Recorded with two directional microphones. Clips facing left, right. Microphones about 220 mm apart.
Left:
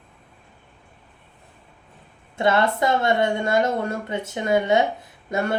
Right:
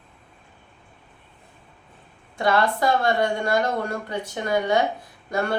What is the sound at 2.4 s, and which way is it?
Speech, 25° left (ahead or behind).